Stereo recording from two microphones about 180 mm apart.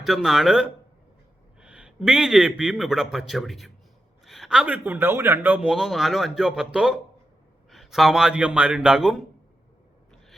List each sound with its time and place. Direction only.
0.0 s a man's voice: centre (ahead or behind)